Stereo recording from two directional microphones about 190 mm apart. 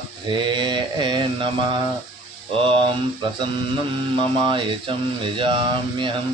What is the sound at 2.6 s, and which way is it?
Mantra, 25° right (ahead or behind).